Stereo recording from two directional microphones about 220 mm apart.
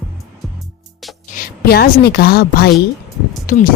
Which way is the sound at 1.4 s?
45° left (ahead or behind).